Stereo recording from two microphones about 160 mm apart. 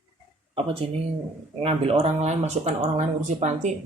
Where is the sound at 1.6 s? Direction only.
40° right (ahead or behind).